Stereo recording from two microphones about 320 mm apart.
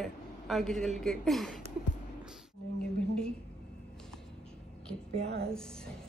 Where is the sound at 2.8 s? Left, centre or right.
Centre.